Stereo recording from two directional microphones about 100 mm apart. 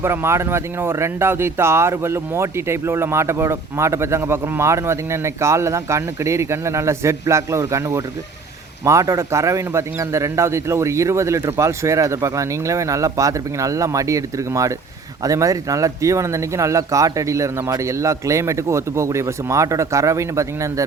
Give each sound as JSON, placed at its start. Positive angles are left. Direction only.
{"t": 0.0, "sound": "a man's voice", "side_deg": -25}